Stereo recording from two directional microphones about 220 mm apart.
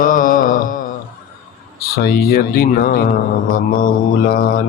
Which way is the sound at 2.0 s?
45° left (ahead or behind).